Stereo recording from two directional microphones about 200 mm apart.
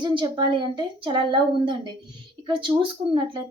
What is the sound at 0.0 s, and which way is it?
A woman's voice, 25° right (ahead or behind).